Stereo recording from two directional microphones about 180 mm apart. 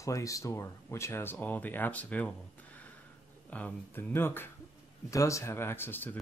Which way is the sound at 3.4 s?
10° left (ahead or behind).